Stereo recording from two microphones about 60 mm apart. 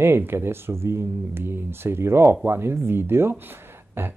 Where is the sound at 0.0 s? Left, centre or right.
Right.